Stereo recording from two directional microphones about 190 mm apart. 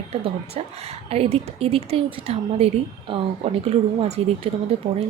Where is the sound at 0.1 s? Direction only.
30° right (ahead or behind).